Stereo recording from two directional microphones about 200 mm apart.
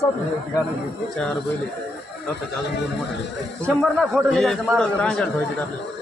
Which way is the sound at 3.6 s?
Centre (ahead or behind).